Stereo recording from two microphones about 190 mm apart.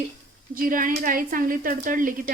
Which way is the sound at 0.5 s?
45° right (ahead or behind).